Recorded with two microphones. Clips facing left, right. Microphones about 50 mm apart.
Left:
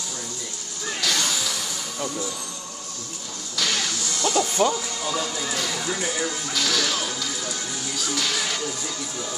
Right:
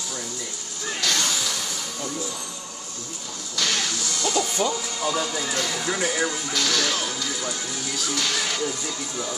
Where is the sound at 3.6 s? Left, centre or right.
Centre.